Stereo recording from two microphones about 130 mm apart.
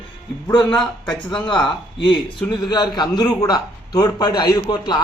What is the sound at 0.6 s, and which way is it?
Speech, 5° left (ahead or behind).